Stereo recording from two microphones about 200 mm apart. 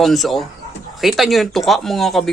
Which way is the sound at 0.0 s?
Centre (ahead or behind).